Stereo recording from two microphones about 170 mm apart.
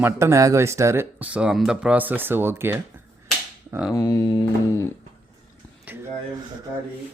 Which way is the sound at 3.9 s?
20° left (ahead or behind).